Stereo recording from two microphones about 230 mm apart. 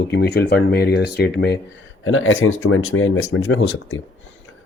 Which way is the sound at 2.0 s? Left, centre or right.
Left.